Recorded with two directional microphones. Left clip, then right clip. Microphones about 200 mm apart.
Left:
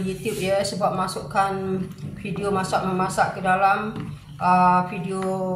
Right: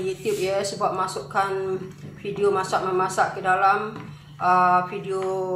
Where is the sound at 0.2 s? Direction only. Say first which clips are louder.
Left 3 dB; 25° right (ahead or behind).